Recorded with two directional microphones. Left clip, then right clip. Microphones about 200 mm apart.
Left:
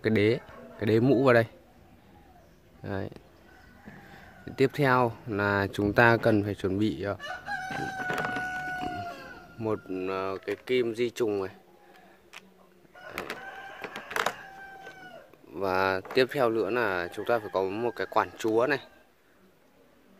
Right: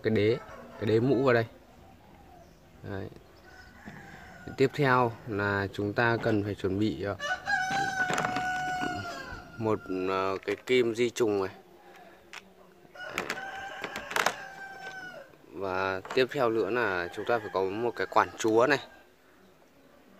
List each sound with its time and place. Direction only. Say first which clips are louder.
0.0 s speech: left 1 dB; 25° left (ahead or behind)
2.8 s speech: left 4 dB; 30° left (ahead or behind)
4.5 s speech: left 1 dB; 20° left (ahead or behind)
7.7 s a sound: right 3 dB; centre (ahead or behind)
8.7 s cat: right 1 dB; centre (ahead or behind)
9.6 s speech: right 1 dB; 5° right (ahead or behind)
13.0 s printer: right 3 dB; centre (ahead or behind)
15.5 s speech: left 4 dB; 25° left (ahead or behind); by 18.9 s centre (ahead or behind)